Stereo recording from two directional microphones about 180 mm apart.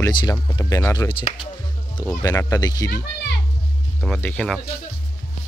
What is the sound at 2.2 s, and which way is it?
Speech, 20° left (ahead or behind).